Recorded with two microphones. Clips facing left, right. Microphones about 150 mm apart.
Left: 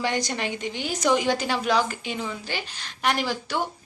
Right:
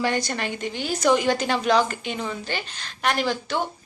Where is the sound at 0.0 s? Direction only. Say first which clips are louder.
Right 2 dB; 15° left (ahead or behind).